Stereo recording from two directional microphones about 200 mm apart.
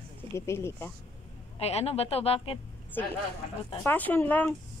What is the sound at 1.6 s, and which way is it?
Speech, 30° left (ahead or behind).